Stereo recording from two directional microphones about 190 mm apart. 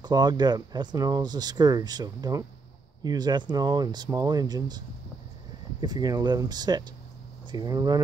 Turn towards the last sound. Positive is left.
turn(degrees=-20)  # may be behind; listen again after turning